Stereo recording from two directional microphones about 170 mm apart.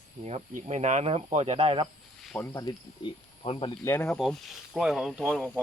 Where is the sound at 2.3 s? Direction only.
10° left (ahead or behind).